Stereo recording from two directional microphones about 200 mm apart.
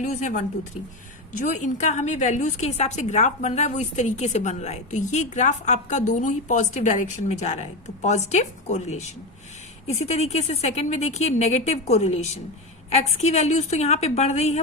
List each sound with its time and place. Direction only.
0.0 s a woman's voice: 35° left (ahead or behind)